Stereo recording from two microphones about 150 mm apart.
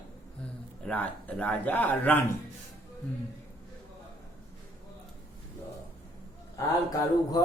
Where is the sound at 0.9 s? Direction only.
10° left (ahead or behind).